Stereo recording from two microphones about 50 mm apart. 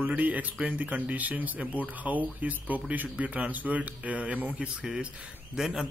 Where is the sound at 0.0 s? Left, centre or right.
Right.